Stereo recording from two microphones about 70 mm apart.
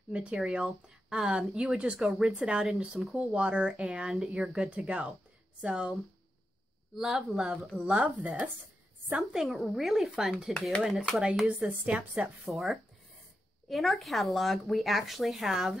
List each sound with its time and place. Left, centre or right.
0.1 s speech: centre
0.4 s speech: centre
3.3 s speech: centre
4.6 s speech: right
7.0 s speech: centre
7.8 s speech: centre
9.1 s speech: centre
11.8 s speech: right
12.4 s speech: centre